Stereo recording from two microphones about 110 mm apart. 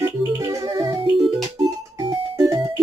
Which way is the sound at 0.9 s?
50° right (ahead or behind).